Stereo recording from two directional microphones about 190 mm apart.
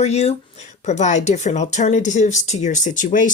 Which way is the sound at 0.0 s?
35° left (ahead or behind).